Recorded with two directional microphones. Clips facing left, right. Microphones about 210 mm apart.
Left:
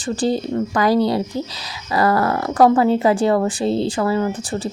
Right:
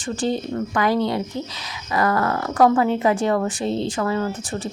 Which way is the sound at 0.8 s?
35° left (ahead or behind).